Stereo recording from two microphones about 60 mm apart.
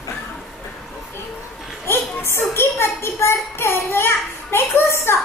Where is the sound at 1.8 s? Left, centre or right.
Left.